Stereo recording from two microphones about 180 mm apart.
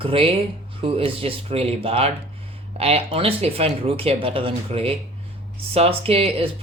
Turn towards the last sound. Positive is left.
turn(degrees=-30)  # may be behind; listen again after turning